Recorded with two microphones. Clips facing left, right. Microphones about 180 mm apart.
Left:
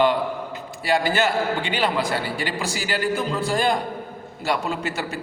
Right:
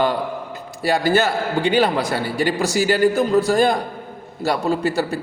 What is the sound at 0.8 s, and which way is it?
A man's voice, 40° right (ahead or behind).